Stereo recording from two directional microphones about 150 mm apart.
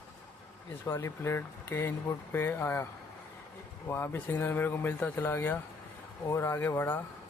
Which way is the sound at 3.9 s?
15° left (ahead or behind).